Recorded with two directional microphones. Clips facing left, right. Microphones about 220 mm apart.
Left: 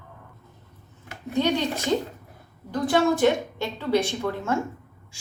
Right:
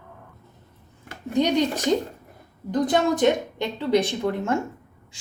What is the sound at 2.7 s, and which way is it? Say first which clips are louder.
A woman's voice: even; 20° right (ahead or behind).